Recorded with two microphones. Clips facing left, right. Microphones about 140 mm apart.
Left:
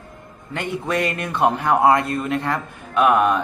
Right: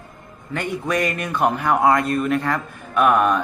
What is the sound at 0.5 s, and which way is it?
Speech, 25° left (ahead or behind).